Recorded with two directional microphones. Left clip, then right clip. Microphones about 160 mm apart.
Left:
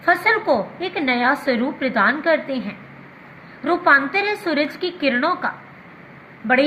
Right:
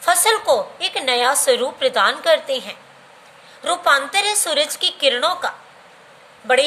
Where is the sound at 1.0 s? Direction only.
70° right (ahead or behind).